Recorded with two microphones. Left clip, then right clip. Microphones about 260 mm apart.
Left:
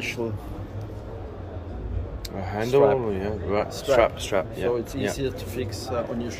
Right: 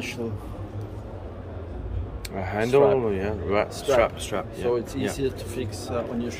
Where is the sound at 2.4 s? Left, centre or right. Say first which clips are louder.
Even; centre.